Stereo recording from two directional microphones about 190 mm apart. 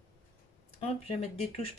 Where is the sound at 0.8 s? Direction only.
35° left (ahead or behind).